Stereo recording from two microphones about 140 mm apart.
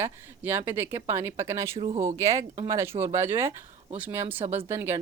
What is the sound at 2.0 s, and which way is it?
Speech, 20° right (ahead or behind).